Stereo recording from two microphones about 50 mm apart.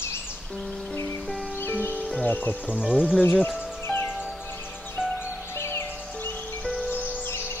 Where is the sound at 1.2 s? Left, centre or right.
Centre.